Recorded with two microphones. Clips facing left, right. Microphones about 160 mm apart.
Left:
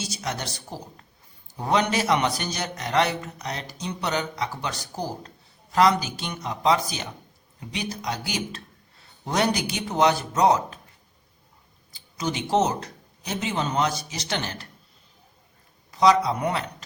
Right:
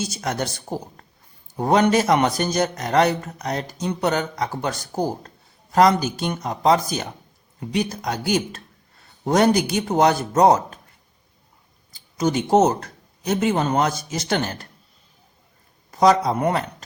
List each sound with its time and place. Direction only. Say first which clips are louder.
0.0 s a man's voice: right 6 dB; 50° right (ahead or behind)
11.9 s speech: right 7 dB; 45° right (ahead or behind)
15.9 s a man's voice: right 3 dB; 45° right (ahead or behind)